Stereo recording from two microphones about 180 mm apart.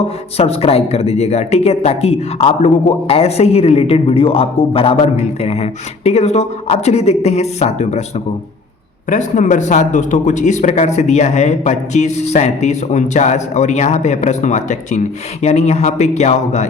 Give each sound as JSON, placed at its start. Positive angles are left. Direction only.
{"t": 0.3, "sound": "speech", "side_deg": 35}
{"t": 9.0, "sound": "speech", "side_deg": 40}